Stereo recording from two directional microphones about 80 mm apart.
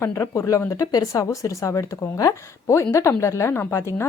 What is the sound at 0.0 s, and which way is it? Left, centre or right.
Speech, left.